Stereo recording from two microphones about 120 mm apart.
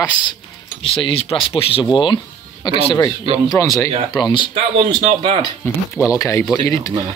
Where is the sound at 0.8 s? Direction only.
50° left (ahead or behind).